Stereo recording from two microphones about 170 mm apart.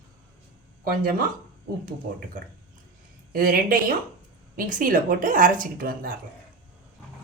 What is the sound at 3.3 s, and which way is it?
A woman's voice, 55° right (ahead or behind).